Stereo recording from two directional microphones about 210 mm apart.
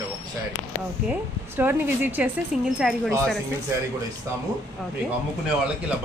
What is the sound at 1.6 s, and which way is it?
Speech, 10° right (ahead or behind).